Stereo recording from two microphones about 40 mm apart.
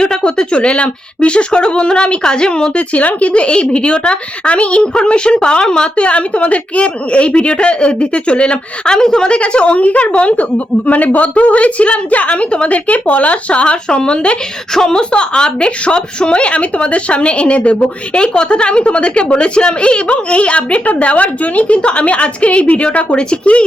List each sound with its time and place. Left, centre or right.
0.0 s a woman's voice: centre
2.7 s a woman's voice: left; by 5.9 s centre
6.0 s a woman's voice: left
14.7 s a woman's voice: centre
15.1 s a woman's voice: left